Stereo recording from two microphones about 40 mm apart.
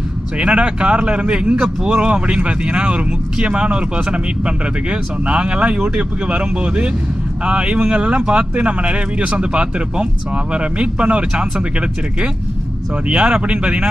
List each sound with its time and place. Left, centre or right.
0.4 s a man's voice: right
13.1 s a man's voice: right